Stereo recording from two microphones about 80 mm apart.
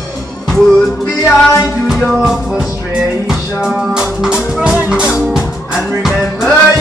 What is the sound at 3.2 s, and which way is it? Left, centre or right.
Music, centre.